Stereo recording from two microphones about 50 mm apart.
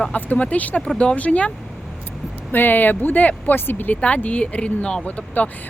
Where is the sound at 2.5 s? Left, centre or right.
Left.